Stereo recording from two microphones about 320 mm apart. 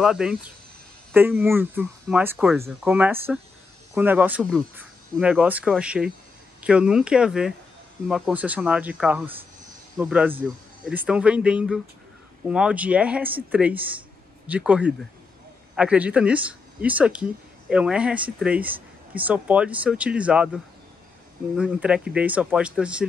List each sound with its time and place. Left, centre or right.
0.0 s speech: centre